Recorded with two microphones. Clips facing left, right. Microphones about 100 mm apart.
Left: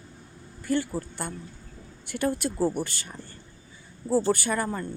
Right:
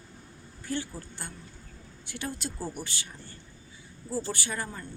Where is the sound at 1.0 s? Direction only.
50° left (ahead or behind).